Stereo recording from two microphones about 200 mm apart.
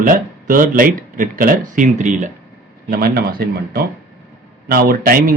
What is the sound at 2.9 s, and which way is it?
Speech, 50° right (ahead or behind).